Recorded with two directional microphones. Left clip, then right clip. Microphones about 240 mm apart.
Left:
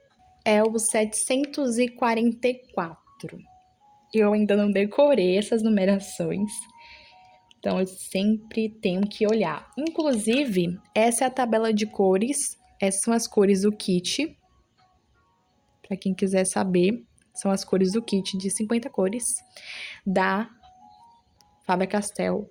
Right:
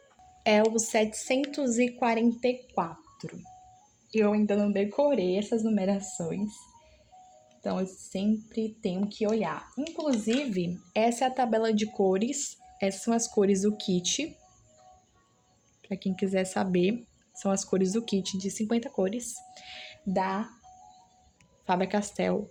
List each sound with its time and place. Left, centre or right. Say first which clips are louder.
0.4 s speech: left 2 dB; centre; by 6.6 s left
7.6 s speech: left 6 dB; left
15.8 s speech: left 4 dB; left
21.7 s a woman's voice: left 3 dB; centre